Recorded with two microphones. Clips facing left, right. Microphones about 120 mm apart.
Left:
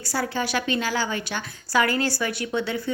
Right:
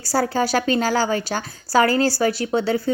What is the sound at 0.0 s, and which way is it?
A woman's voice, 40° right (ahead or behind).